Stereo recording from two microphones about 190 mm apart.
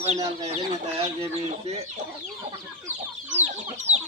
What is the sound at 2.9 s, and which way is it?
Chicken, 35° right (ahead or behind).